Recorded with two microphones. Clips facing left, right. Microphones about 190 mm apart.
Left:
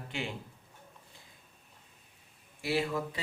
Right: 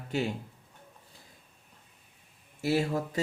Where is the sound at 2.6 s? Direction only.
45° right (ahead or behind).